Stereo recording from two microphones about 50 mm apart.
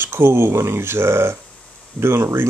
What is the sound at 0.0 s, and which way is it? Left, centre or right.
Speech, right.